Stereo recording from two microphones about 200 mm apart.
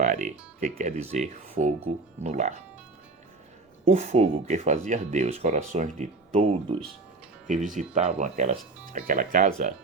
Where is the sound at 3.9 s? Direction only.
35° right (ahead or behind).